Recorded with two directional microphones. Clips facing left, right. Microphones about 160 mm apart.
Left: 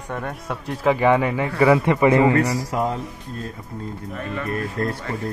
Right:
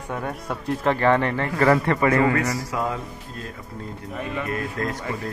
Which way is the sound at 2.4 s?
35° left (ahead or behind).